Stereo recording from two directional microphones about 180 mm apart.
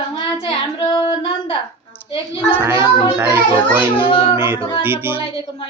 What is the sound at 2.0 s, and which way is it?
Speech, 30° left (ahead or behind).